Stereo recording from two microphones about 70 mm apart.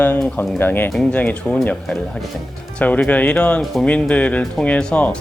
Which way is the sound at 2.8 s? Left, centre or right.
Centre.